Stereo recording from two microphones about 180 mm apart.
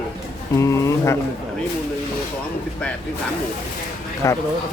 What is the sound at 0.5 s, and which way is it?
Speech, 15° left (ahead or behind).